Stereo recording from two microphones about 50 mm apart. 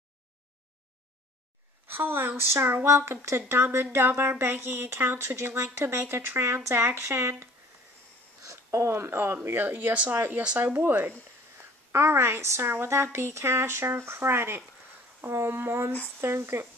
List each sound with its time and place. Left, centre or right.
1.9 s speech: right
7.0 s speech: right
8.5 s speech: right
9.6 s speech: right
11.9 s speech: right